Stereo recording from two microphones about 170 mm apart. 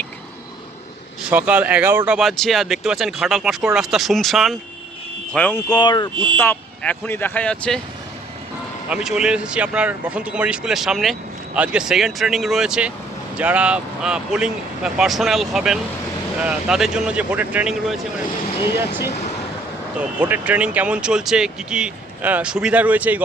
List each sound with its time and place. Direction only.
1.2 s speech: 10° right (ahead or behind); by 5.6 s 10° left (ahead or behind)
5.6 s speech: 25° left (ahead or behind)
6.3 s speech: 15° left (ahead or behind)
8.9 s speech: 5° right (ahead or behind)
20.0 s speech: 10° right (ahead or behind)